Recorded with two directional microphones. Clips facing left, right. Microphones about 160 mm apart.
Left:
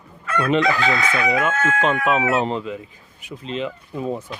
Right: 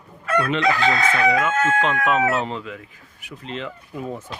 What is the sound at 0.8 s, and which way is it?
Speech, 35° right (ahead or behind).